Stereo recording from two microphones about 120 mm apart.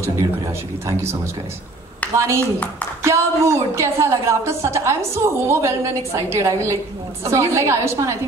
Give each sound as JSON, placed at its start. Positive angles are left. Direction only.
{"t": 2.1, "sound": "a woman's voice", "side_deg": -25}